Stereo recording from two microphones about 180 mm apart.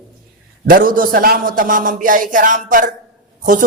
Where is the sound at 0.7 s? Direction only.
50° right (ahead or behind).